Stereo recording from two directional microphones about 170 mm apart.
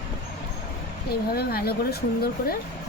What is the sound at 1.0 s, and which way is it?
Speech, 65° left (ahead or behind).